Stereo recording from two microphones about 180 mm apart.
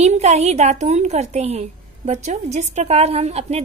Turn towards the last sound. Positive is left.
turn(degrees=-35)  # may be behind; listen again after turning